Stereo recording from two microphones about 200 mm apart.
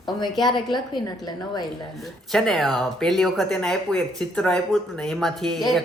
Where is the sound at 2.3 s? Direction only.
Centre (ahead or behind).